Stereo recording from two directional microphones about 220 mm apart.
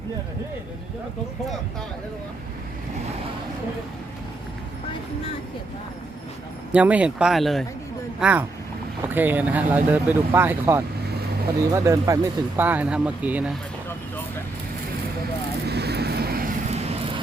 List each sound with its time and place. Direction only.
6.7 s speech: 5° right (ahead or behind)
15.7 s vehicle: 50° right (ahead or behind)